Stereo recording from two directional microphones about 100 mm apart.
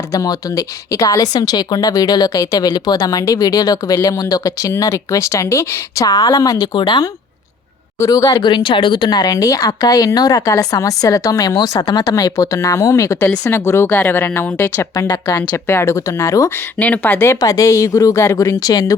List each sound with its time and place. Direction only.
0.1 s a woman's voice: 35° left (ahead or behind)
6.7 s speech: 45° left (ahead or behind)
7.9 s a woman's voice: 30° left (ahead or behind)
8.3 s a woman's voice: 50° left (ahead or behind); by 14.8 s 20° left (ahead or behind)
14.9 s a woman's voice: 40° left (ahead or behind)
15.4 s speech: 25° left (ahead or behind)
16.7 s speech: 15° left (ahead or behind)
17.2 s a woman's voice: 35° left (ahead or behind)